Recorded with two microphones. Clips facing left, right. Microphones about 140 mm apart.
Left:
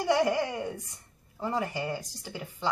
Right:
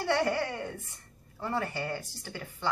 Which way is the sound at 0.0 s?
15° left (ahead or behind).